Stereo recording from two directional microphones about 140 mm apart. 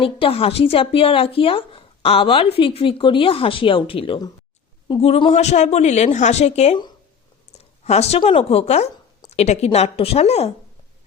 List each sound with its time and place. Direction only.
0.0 s a woman's voice: 40° left (ahead or behind)
7.9 s a woman's voice: 50° left (ahead or behind)